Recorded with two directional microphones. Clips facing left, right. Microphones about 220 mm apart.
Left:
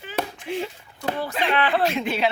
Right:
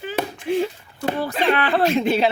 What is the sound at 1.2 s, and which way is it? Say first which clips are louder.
Speech: right 3 dB; 40° right (ahead or behind).